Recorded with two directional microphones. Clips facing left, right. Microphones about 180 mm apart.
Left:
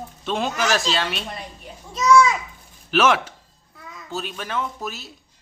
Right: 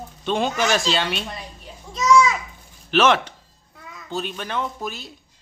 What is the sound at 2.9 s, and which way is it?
Speech, 5° left (ahead or behind).